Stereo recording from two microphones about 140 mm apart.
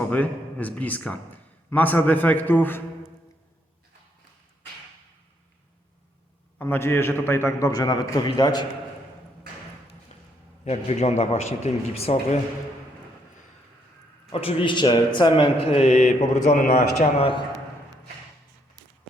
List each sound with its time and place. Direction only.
0.0 s a man's voice: 10° left (ahead or behind)
6.6 s a man's voice: 15° left (ahead or behind)
10.1 s a sound: 50° left (ahead or behind)
10.7 s a man's voice: 55° left (ahead or behind)
14.4 s speech: 35° left (ahead or behind); by 16.6 s 55° left (ahead or behind)
17.2 s speech: 40° left (ahead or behind)
18.8 s run: 30° right (ahead or behind)